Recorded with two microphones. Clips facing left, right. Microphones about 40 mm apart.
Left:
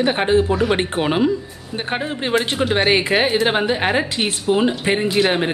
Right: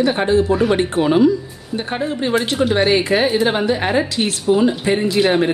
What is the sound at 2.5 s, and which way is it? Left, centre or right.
Speech, left.